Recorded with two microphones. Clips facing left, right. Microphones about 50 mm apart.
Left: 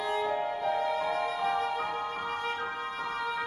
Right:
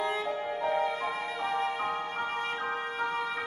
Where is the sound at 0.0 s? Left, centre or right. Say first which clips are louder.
Left 1 dB; centre.